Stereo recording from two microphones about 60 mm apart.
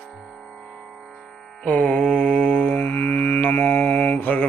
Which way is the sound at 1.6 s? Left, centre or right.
Left.